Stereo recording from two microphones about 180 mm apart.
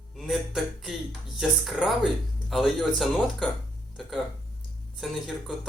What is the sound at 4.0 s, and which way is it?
Speech, centre (ahead or behind).